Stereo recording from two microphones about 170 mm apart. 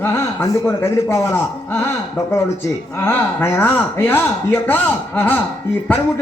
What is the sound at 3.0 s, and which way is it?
Speech, 10° left (ahead or behind).